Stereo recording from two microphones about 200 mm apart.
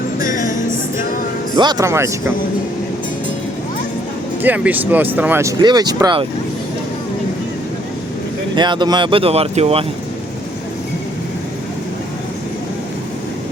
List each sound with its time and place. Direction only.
0.2 s music: 40° left (ahead or behind)
1.5 s speech: 20° right (ahead or behind)
4.4 s speech: 10° right (ahead or behind)
8.5 s speech: 20° right (ahead or behind)